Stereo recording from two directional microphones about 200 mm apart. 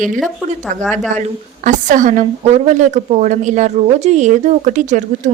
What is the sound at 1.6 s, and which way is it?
A woman's voice, 40° right (ahead or behind).